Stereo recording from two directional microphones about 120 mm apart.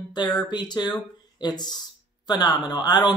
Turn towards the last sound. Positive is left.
turn(degrees=35)  # may be behind; listen again after turning